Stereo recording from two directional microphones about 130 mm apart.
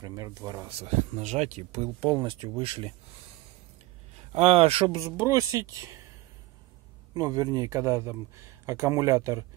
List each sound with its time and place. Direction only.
0.0 s speech: 25° right (ahead or behind)
0.7 s speech: 55° right (ahead or behind)
2.1 s speech: 35° right (ahead or behind)
4.3 s speech: 50° right (ahead or behind)
5.3 s speech: 25° right (ahead or behind)
7.2 s speech: 30° right (ahead or behind)